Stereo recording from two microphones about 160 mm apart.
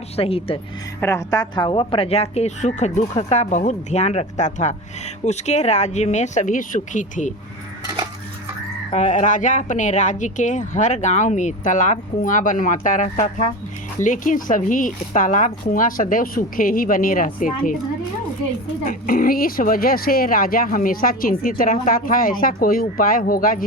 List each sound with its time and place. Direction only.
0.2 s speech: 35° left (ahead or behind)
1.0 s speech: 20° left (ahead or behind); by 7.3 s 50° left (ahead or behind)
8.9 s speech: 50° left (ahead or behind)
18.9 s speech: 70° left (ahead or behind)